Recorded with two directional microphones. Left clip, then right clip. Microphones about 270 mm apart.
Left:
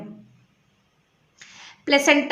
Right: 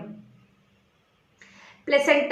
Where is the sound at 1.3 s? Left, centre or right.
Left.